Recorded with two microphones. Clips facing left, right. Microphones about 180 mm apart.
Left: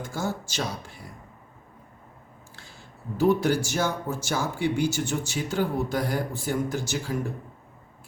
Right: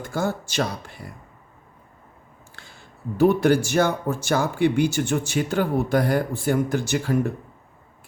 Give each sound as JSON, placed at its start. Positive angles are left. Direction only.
{"t": 0.0, "sound": "speech", "side_deg": -60}
{"t": 3.2, "sound": "speech", "side_deg": -60}